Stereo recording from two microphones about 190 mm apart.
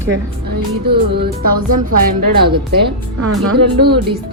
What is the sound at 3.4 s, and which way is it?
Speech, 60° right (ahead or behind).